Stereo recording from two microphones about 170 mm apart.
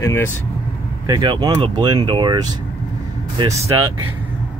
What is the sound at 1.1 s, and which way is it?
Speech, 25° right (ahead or behind).